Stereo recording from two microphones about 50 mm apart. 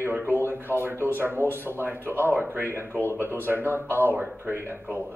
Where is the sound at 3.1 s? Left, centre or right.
Right.